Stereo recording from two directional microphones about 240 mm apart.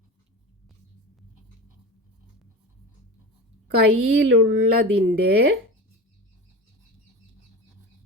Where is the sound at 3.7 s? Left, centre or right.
Right.